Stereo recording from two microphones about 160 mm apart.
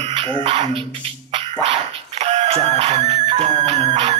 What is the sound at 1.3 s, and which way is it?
Dog, 35° right (ahead or behind).